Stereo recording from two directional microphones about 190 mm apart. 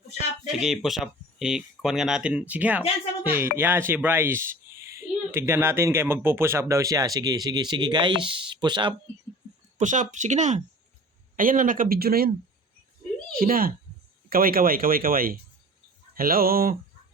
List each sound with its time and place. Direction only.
0.6 s speech: centre (ahead or behind); by 9.0 s 25° right (ahead or behind)
9.7 s speech: 40° right (ahead or behind)
13.3 s speech: 50° right (ahead or behind)